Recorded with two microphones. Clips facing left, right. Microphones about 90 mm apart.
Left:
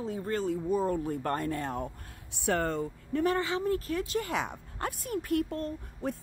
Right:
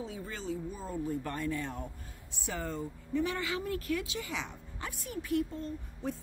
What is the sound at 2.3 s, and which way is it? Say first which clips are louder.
Speech: left 8 dB; 65° left (ahead or behind).